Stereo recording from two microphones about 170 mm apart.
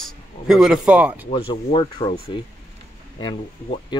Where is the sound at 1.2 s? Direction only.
30° left (ahead or behind).